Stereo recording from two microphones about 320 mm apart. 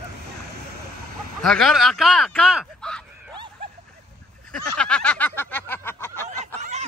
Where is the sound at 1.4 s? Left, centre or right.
Centre.